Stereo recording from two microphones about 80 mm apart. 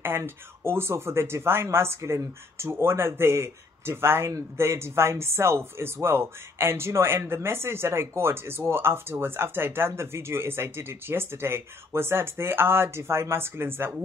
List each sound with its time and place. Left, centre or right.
0.0 s speech: right